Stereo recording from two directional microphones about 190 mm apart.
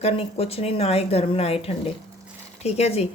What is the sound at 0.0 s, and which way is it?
Speech, 30° left (ahead or behind).